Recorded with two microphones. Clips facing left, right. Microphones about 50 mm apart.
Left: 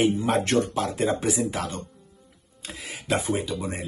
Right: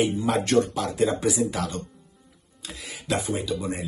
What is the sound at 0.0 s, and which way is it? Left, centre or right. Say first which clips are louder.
Speech: left 1 dB; left.